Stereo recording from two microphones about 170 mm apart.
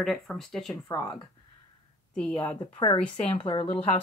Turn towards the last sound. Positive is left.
turn(degrees=35)  # may be behind; listen again after turning